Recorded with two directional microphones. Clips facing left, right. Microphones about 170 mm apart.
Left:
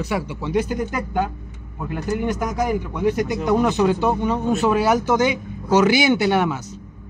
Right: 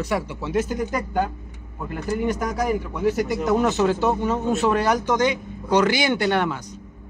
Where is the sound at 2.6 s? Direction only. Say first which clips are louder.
Left 1 dB; centre (ahead or behind).